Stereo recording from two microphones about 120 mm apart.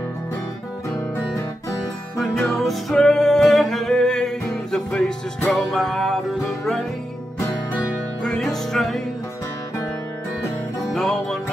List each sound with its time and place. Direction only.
0.8 s music: 25° left (ahead or behind)
2.5 s music: centre (ahead or behind)
8.2 s music: 5° left (ahead or behind)
10.9 s music: 5° left (ahead or behind)